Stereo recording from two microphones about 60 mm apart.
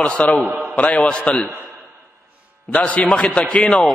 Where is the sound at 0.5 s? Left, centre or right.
Right.